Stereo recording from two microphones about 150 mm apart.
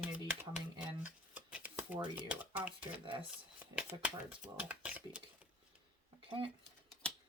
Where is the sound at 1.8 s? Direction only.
15° right (ahead or behind).